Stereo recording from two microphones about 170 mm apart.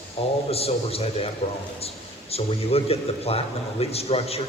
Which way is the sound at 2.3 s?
35° left (ahead or behind).